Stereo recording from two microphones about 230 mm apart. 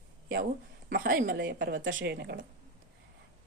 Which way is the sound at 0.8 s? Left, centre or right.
Right.